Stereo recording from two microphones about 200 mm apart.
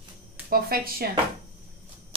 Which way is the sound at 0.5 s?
50° right (ahead or behind).